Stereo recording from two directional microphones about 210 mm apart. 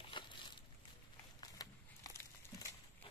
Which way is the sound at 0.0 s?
20° left (ahead or behind).